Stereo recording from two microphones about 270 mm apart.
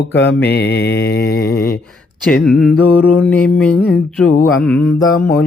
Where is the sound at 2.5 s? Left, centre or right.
Centre.